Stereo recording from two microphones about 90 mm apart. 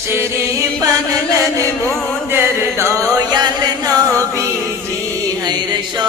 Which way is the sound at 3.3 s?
50° right (ahead or behind).